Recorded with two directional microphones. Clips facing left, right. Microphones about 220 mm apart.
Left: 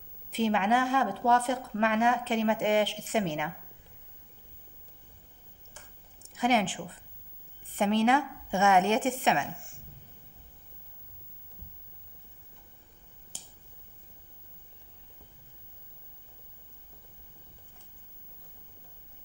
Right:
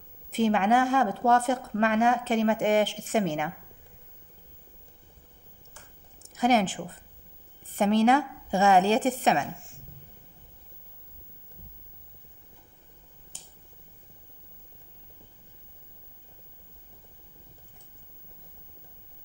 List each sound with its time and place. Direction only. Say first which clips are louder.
0.3 s speech: right 3 dB; 50° right (ahead or behind)
6.3 s a woman's voice: right 3 dB; 40° right (ahead or behind)